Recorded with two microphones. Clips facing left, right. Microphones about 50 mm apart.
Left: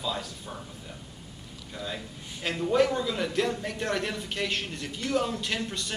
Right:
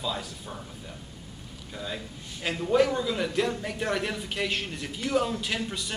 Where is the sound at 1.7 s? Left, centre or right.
Centre.